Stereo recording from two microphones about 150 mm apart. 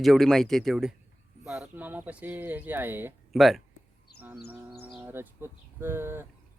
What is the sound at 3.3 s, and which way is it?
Speech, centre (ahead or behind).